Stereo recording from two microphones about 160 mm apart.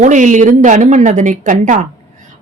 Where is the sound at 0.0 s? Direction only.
50° right (ahead or behind).